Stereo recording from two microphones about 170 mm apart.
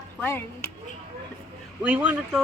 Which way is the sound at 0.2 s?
10° left (ahead or behind).